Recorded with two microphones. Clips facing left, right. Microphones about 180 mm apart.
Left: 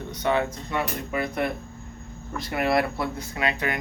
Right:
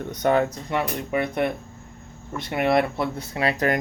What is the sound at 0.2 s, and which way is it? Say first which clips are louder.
Speech: right 4 dB; 45° right (ahead or behind).